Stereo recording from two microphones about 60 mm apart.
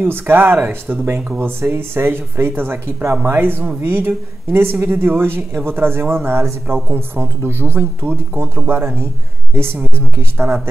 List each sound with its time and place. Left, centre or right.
0.0 s speech: right